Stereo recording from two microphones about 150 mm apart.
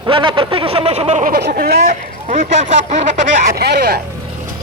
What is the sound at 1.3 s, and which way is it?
Speech, 90° right.